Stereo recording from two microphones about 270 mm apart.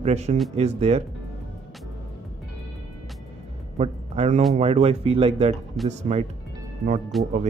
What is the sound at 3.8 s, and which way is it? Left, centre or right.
Speech, right.